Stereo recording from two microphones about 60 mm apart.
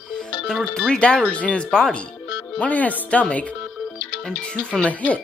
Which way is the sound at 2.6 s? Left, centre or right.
Left.